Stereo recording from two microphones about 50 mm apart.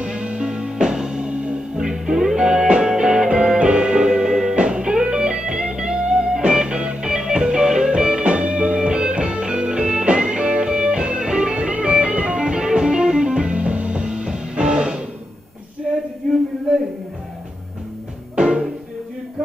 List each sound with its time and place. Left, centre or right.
0.0 s music: centre
18.3 s music: centre